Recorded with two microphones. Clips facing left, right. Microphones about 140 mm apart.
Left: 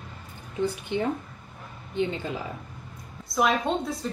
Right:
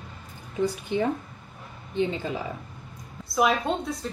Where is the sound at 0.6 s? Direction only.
35° right (ahead or behind).